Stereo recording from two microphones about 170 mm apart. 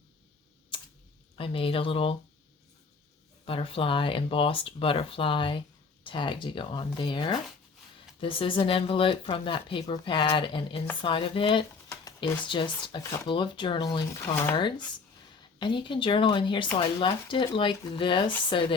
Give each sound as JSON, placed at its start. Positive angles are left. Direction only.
{"t": 0.7, "sound": "computer keyboard", "side_deg": 30}
{"t": 1.4, "sound": "speech", "side_deg": 30}
{"t": 3.4, "sound": "speech", "side_deg": 30}
{"t": 15.5, "sound": "speech", "side_deg": 25}